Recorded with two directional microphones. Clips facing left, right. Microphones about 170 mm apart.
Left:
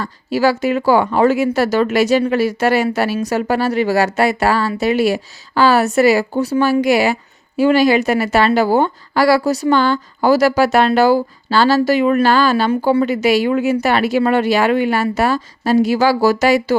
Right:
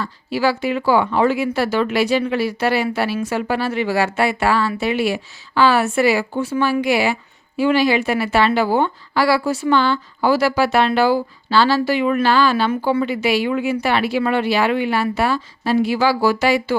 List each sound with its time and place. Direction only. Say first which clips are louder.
0.0 s a woman's voice: left 4 dB; 45° left (ahead or behind)